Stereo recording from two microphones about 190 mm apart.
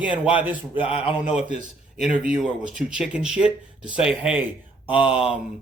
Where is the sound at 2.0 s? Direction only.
5° right (ahead or behind).